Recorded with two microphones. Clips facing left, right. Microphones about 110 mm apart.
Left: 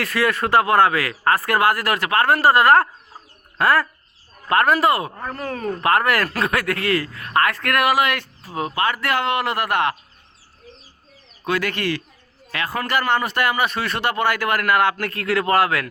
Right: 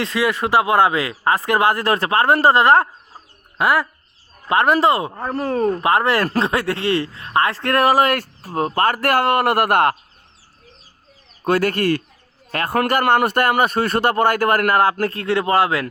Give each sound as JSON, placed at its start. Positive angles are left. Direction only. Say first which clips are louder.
{"t": 0.0, "sound": "speech", "louder": "right 1 dB", "side_deg": -20}
{"t": 11.4, "sound": "a man's voice", "louder": "right 5 dB", "side_deg": -45}